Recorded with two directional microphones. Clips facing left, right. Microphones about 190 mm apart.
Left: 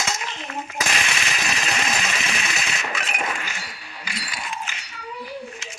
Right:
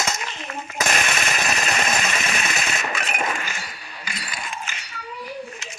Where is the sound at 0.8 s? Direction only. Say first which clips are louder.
Right 5 dB; 55° right (ahead or behind).